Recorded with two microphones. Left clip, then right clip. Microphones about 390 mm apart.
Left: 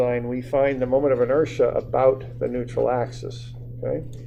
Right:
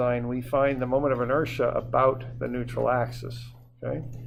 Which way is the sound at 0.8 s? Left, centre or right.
Right.